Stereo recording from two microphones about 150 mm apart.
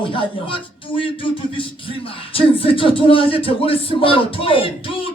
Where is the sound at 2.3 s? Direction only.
40° left (ahead or behind).